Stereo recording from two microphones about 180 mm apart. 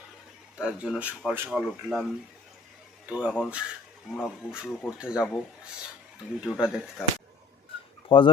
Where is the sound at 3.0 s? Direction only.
5° right (ahead or behind).